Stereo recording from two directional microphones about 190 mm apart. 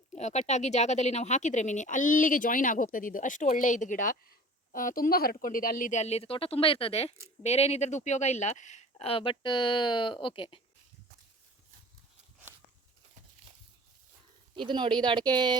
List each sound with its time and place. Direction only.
0.1 s speech: 35° left (ahead or behind)
14.5 s speech: 25° right (ahead or behind)